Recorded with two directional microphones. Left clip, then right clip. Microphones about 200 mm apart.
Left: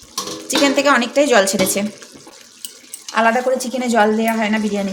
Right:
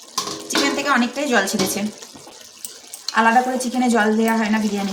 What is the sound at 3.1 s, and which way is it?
A woman's voice, 35° left (ahead or behind).